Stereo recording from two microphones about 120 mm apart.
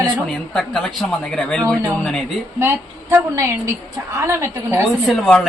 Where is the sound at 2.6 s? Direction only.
20° right (ahead or behind).